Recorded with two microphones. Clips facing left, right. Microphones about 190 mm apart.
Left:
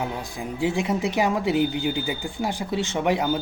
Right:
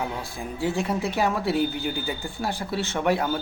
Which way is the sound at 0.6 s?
15° left (ahead or behind).